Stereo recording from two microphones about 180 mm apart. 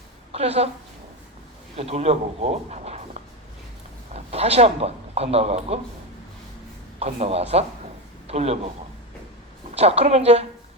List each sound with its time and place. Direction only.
0.3 s a woman's voice: 35° right (ahead or behind)
1.7 s speech: 35° right (ahead or behind)
4.1 s speech: 35° right (ahead or behind)
7.0 s a woman's voice: 35° right (ahead or behind)
9.7 s a woman's voice: 35° right (ahead or behind)